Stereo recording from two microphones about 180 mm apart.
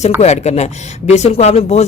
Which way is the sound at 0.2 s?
40° left (ahead or behind).